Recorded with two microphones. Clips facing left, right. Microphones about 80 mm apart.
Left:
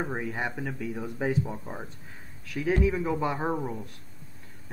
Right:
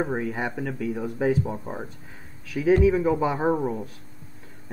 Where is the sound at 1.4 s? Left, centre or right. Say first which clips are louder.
Right 5 dB; right.